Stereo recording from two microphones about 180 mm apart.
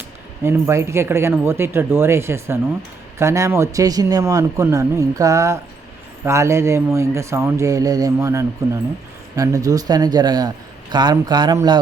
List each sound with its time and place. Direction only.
0.4 s speech: 15° right (ahead or behind)